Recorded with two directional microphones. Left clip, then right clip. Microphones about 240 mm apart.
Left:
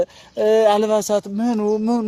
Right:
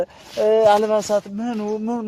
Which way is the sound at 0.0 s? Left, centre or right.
Left.